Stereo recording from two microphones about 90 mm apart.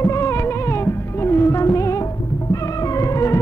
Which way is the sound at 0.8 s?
25° left (ahead or behind).